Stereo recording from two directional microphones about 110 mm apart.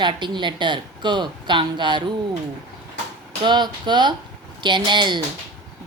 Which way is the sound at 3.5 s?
45° right (ahead or behind).